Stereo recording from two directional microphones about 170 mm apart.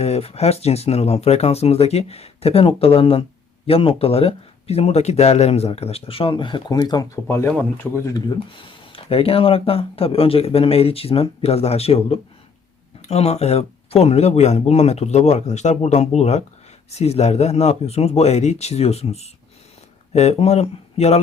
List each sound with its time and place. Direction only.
0.0 s speech: 35° left (ahead or behind); by 8.2 s 15° left (ahead or behind)
8.4 s speech: 30° left (ahead or behind)